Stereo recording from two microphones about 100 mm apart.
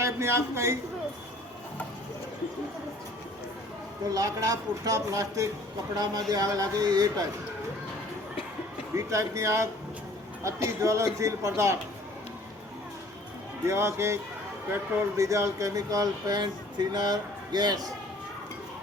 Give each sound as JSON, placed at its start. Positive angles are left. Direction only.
{"t": 0.0, "sound": "a man's voice", "side_deg": -30}
{"t": 4.1, "sound": "speech", "side_deg": -35}
{"t": 9.0, "sound": "speech", "side_deg": -30}
{"t": 13.7, "sound": "speech", "side_deg": -25}